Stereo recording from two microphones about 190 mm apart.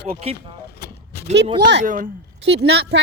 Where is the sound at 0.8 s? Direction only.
55° left (ahead or behind).